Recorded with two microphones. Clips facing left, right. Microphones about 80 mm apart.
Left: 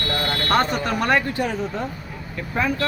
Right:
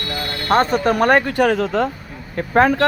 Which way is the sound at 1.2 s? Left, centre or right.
Right.